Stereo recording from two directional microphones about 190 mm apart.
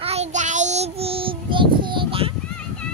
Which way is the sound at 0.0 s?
35° right (ahead or behind).